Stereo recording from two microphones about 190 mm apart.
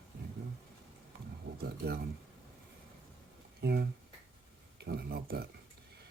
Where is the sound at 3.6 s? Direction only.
60° right (ahead or behind).